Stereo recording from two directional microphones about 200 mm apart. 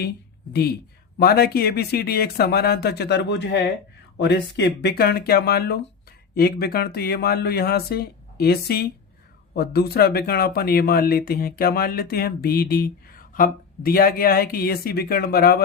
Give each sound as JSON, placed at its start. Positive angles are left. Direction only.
{"t": 0.5, "sound": "speech", "side_deg": 50}